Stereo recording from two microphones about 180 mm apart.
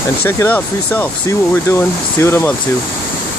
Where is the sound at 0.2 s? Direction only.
10° left (ahead or behind).